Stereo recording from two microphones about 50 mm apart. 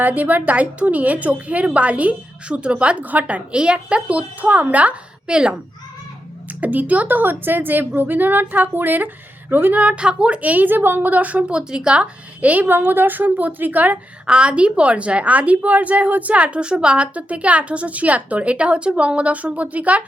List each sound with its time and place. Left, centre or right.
0.0 s a woman's voice: right
5.3 s speech: centre
6.6 s a woman's voice: right
9.7 s a woman's voice: right
12.6 s a woman's voice: right
14.3 s a woman's voice: right